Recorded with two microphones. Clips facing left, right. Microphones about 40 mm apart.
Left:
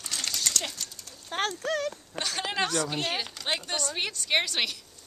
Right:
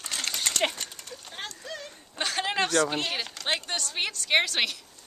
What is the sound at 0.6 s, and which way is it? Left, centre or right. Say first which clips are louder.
Clip-clop: right 6 dB; right.